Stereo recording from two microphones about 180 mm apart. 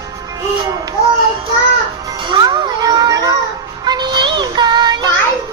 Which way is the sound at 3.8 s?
25° right (ahead or behind).